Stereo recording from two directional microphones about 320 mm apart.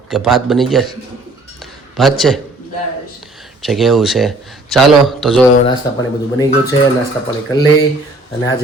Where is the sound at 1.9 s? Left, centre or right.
Centre.